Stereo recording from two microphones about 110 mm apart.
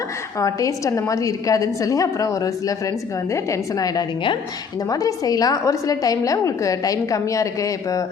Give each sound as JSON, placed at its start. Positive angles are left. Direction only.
{"t": 0.3, "sound": "a woman's voice", "side_deg": 30}